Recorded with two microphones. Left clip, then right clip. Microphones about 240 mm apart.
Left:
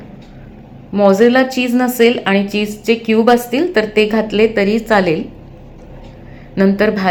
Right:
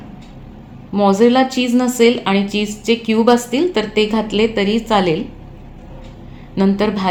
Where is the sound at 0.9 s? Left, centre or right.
Centre.